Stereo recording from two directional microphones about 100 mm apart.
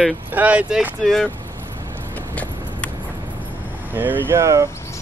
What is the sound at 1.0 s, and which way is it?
Speech, 5° left (ahead or behind).